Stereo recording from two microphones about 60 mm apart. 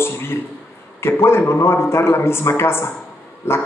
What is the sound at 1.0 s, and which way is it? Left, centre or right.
A man's voice, left.